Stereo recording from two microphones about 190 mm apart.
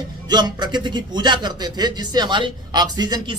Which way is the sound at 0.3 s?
20° right (ahead or behind).